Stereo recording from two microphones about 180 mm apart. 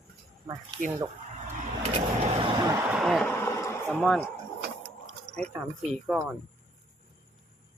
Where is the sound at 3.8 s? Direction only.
Centre (ahead or behind).